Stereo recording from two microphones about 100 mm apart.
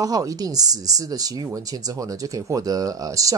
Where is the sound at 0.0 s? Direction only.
35° right (ahead or behind).